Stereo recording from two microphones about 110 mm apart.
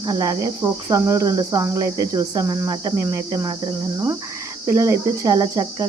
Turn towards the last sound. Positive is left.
turn(degrees=-35)  # may be behind; listen again after turning